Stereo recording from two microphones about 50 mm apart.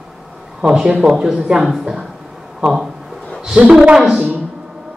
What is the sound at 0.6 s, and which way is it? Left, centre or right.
A woman's voice, centre.